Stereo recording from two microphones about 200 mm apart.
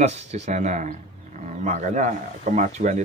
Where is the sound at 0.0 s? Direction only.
35° right (ahead or behind).